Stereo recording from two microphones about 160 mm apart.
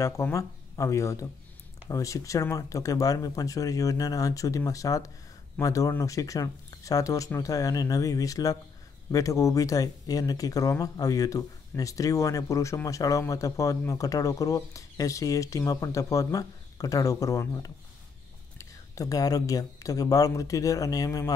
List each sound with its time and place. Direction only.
0.0 s speech: 20° left (ahead or behind)